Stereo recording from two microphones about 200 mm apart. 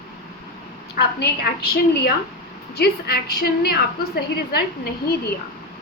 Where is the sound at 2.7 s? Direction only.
55° left (ahead or behind).